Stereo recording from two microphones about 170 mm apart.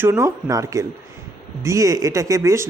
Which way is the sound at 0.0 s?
15° right (ahead or behind).